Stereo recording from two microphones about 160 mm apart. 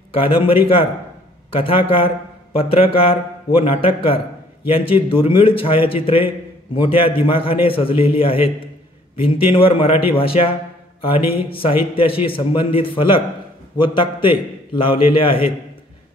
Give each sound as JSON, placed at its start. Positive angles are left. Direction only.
{"t": 0.1, "sound": "a man's voice", "side_deg": 35}